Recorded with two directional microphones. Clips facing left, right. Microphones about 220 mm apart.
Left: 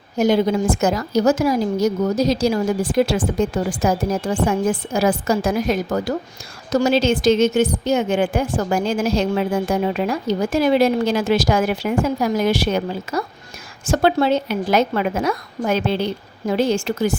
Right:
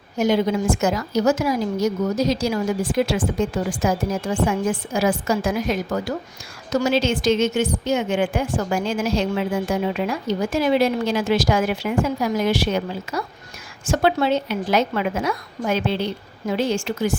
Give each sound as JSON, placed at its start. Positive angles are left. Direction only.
{"t": 0.2, "sound": "a woman's voice", "side_deg": 35}